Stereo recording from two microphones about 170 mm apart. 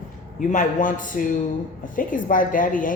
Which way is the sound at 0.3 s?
50° left (ahead or behind).